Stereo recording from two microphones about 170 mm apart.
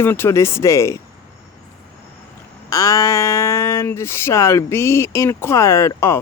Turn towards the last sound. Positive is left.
turn(degrees=15)  # may be behind; listen again after turning